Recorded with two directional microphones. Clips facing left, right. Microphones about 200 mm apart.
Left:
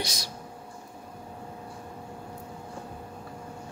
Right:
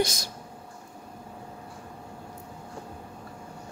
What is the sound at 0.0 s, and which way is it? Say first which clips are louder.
Speech: right 7 dB; 50° right (ahead or behind).